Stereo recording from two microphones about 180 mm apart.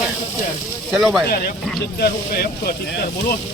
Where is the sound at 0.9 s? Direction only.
Centre (ahead or behind).